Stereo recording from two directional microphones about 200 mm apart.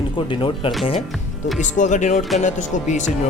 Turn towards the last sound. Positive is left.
turn(degrees=35)  # may be behind; listen again after turning